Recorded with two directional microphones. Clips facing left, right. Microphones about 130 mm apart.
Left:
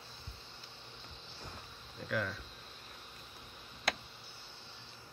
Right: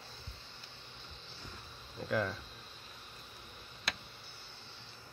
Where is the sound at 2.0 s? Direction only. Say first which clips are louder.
Right 3 dB; 30° right (ahead or behind).